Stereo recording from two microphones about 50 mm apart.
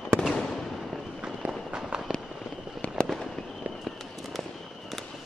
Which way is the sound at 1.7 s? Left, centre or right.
Centre.